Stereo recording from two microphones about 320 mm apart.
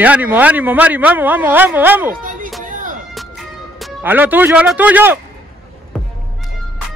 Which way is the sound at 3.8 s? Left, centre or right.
Centre.